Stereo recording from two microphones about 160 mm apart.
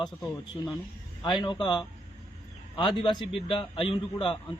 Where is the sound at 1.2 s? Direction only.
30° left (ahead or behind).